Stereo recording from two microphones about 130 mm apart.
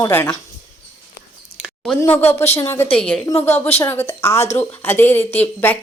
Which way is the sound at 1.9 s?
15° left (ahead or behind).